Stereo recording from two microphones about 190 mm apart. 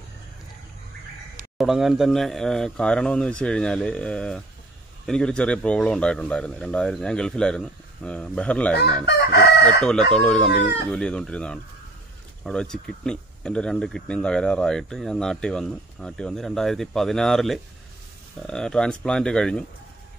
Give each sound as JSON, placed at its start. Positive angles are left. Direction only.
{"t": 1.6, "sound": "speech", "side_deg": 0}
{"t": 8.7, "sound": "chicken", "side_deg": 55}
{"t": 10.1, "sound": "speech", "side_deg": 5}